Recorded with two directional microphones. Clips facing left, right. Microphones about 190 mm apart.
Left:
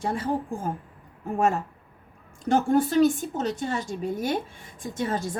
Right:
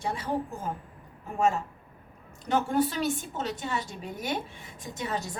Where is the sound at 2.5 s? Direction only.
45° left (ahead or behind).